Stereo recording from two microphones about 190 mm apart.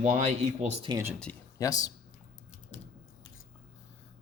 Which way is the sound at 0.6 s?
30° right (ahead or behind).